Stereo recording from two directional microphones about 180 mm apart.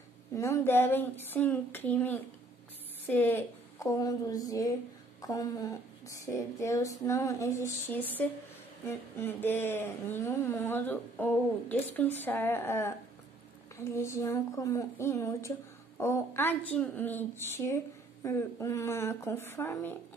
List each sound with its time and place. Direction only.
0.3 s a woman's voice: 15° left (ahead or behind)